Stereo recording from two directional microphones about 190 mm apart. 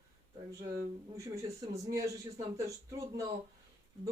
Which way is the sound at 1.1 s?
15° right (ahead or behind).